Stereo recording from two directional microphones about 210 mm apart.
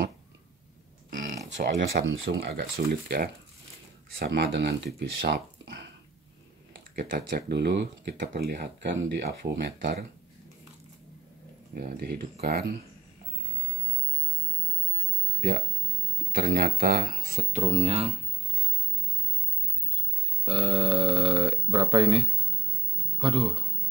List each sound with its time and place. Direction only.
1.1 s a sound: 40° right (ahead or behind)
1.6 s speech: 45° right (ahead or behind)
2.1 s speech: 65° right (ahead or behind)
7.0 s speech: 45° right (ahead or behind)
11.7 s speech: 45° right (ahead or behind)
16.3 s speech: 45° right (ahead or behind)
17.4 s speech: 35° right (ahead or behind)
20.4 s a man's voice: 25° right (ahead or behind)